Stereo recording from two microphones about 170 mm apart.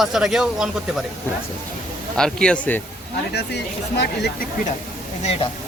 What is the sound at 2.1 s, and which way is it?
Speech, 5° left (ahead or behind).